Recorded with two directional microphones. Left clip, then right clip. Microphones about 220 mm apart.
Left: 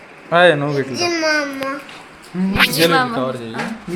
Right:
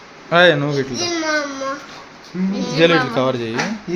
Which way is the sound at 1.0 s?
40° left (ahead or behind).